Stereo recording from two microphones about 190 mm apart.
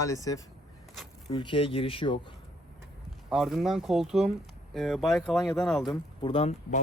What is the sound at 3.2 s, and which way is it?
Speech, centre (ahead or behind).